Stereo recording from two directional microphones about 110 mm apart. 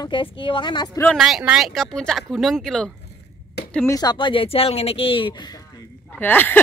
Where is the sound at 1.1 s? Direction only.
5° right (ahead or behind).